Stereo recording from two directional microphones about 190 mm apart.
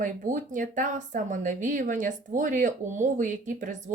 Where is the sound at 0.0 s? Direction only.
45° right (ahead or behind).